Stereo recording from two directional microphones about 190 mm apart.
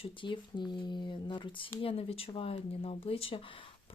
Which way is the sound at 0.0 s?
25° left (ahead or behind).